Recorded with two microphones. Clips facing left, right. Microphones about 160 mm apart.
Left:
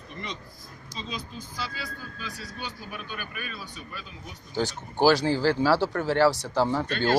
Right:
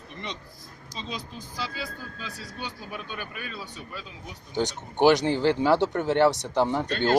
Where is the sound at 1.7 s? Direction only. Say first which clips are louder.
Right 2 dB; 25° right (ahead or behind).